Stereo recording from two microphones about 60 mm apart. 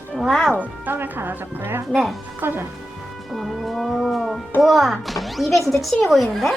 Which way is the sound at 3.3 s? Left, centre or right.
Centre.